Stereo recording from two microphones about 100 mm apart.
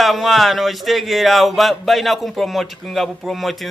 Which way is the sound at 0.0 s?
Centre (ahead or behind).